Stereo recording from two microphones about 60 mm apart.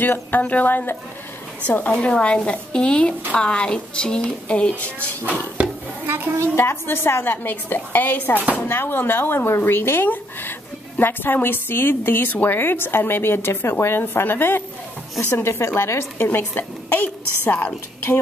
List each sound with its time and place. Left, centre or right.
0.0 s a woman's voice: left
6.0 s a woman's voice: right
6.5 s a woman's voice: left